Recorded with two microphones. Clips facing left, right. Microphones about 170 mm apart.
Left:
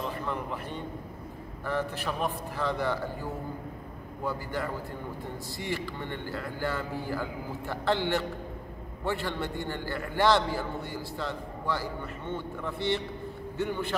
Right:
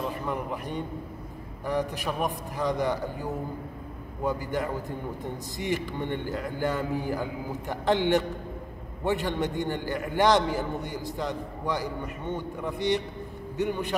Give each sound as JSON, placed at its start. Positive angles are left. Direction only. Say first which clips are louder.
{"t": 0.3, "sound": "a man's voice", "louder": "right 3 dB", "side_deg": -15}